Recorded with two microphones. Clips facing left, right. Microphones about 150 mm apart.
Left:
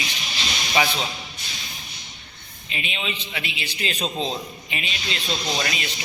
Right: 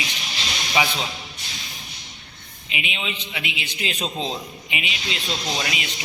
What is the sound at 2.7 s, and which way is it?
A man's voice, 15° right (ahead or behind).